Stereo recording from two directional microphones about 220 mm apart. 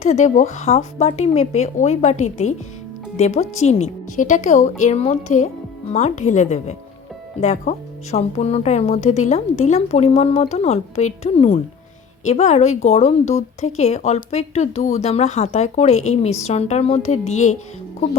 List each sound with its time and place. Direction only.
0.0 s speech: 30° left (ahead or behind)